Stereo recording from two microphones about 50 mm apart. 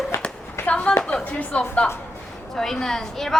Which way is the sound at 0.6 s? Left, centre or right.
Left.